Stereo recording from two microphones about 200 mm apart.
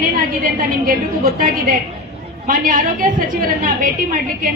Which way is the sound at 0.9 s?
45° right (ahead or behind).